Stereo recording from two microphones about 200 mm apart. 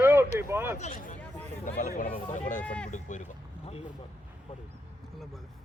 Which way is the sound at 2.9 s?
40° left (ahead or behind).